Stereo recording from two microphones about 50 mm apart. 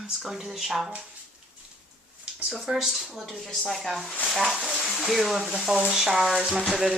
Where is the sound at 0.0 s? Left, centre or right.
Centre.